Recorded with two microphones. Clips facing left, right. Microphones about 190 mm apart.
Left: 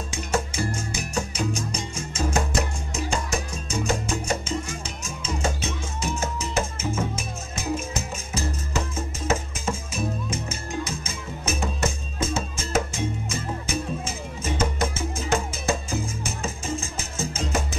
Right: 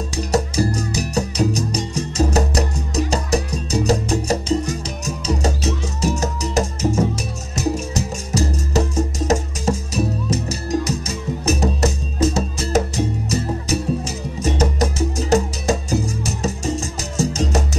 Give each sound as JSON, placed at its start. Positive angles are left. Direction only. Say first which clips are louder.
{"t": 0.1, "sound": "music", "louder": "right 7 dB", "side_deg": -40}
{"t": 8.3, "sound": "music", "louder": "right 9 dB", "side_deg": -40}